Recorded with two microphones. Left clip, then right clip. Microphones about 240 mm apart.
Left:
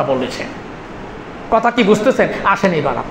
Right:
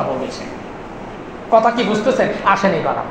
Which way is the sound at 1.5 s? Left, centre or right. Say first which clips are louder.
Left 1 dB; left.